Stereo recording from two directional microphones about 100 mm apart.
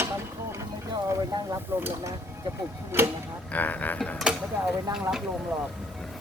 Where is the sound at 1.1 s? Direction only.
30° right (ahead or behind).